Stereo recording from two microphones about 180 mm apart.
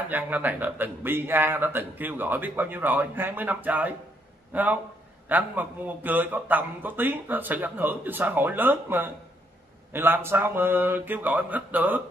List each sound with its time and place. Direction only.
0.1 s a man's voice: 10° right (ahead or behind)